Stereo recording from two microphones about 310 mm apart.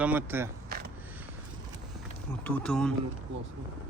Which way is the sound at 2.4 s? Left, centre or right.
Centre.